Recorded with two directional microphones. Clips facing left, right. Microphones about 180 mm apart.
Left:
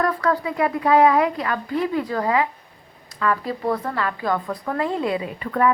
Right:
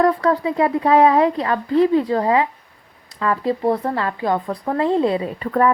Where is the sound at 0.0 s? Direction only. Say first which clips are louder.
Right 5 dB; 25° right (ahead or behind).